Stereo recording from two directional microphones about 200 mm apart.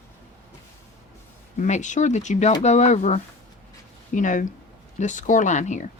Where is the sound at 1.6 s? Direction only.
35° left (ahead or behind).